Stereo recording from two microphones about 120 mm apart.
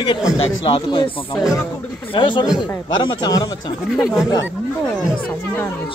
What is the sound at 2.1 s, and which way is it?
Speech, 45° left (ahead or behind).